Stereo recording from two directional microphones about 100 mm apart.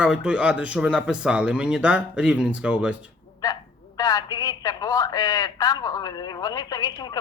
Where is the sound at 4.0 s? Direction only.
40° left (ahead or behind).